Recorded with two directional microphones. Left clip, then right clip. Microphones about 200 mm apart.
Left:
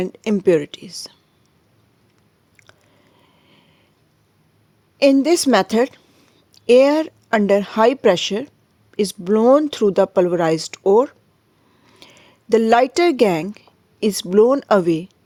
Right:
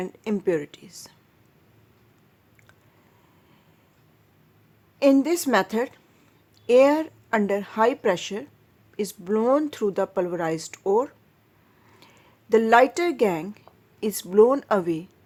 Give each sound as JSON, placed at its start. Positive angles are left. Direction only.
{"t": 0.0, "sound": "speech", "side_deg": 40}
{"t": 5.1, "sound": "speech", "side_deg": 35}